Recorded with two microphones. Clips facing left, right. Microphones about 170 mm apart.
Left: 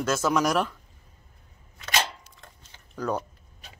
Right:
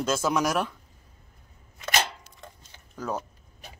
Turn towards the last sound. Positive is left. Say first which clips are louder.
# left 3 dB
turn(degrees=-5)  # may be behind; listen again after turning